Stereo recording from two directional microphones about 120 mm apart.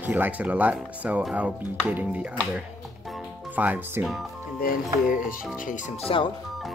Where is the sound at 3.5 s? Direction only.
15° right (ahead or behind).